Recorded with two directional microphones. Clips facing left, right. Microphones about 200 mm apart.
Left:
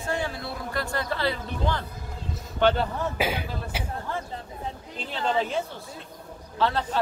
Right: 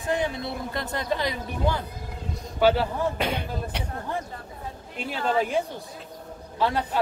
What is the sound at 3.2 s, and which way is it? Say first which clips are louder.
Speech: even; 5° left (ahead or behind).